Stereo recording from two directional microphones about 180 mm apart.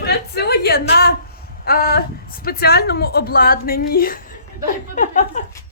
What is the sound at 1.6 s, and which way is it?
A woman's voice, 55° left (ahead or behind).